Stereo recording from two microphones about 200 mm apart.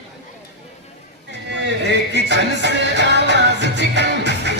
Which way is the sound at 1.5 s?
60° right (ahead or behind).